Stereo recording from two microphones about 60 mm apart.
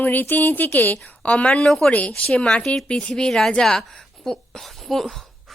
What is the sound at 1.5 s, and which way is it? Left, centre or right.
A woman's voice, centre.